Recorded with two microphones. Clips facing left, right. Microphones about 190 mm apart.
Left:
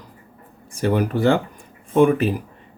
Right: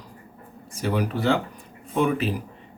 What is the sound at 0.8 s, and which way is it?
Speech, 50° left (ahead or behind).